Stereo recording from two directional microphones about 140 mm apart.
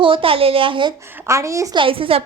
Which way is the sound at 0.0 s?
40° right (ahead or behind).